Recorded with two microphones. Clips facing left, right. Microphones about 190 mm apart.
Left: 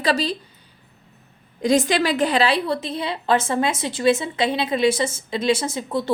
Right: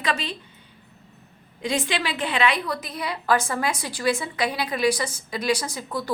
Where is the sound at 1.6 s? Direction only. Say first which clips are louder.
Left 8 dB; 40° left (ahead or behind).